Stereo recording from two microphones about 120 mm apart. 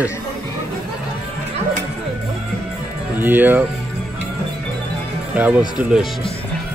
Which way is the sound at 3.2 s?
15° right (ahead or behind).